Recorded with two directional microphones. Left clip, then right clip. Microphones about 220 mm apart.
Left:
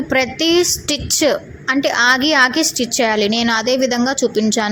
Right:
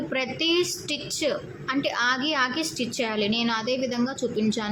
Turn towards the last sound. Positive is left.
turn(degrees=30)  # may be behind; listen again after turning